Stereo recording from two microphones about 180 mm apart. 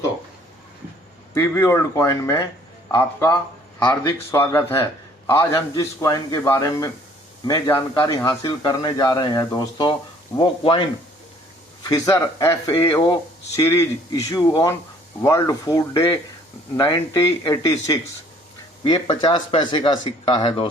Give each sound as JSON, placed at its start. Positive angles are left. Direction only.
{"t": 1.3, "sound": "a man's voice", "side_deg": 15}
{"t": 11.9, "sound": "a man's voice", "side_deg": 20}